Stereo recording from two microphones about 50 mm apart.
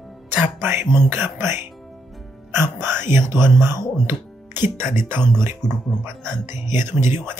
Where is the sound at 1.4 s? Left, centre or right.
Right.